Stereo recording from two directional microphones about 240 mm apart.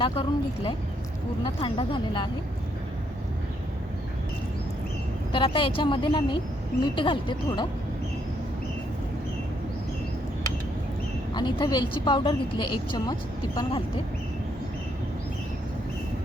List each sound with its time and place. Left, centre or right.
0.0 s a woman's voice: left
5.3 s a woman's voice: left
11.3 s a woman's voice: centre